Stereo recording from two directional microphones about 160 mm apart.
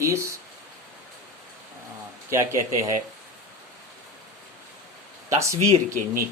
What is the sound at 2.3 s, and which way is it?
Speech, 20° right (ahead or behind).